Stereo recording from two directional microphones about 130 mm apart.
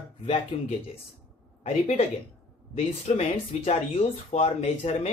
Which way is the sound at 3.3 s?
50° left (ahead or behind).